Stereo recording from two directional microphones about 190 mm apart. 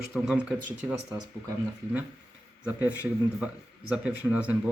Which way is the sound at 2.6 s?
15° left (ahead or behind).